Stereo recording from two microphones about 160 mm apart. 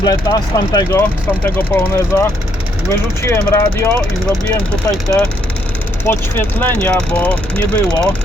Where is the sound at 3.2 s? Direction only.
20° left (ahead or behind).